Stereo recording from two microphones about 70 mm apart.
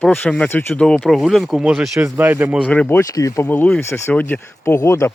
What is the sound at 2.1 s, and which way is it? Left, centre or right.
Speech, right.